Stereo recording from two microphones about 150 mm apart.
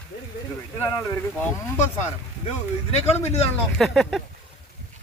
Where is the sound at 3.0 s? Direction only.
45° left (ahead or behind).